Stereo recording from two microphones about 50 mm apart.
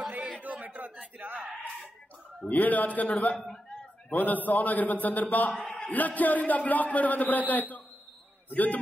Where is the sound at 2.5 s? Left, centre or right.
Left.